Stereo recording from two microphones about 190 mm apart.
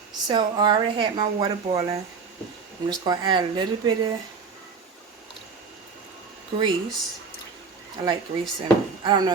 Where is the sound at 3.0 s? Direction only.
25° right (ahead or behind).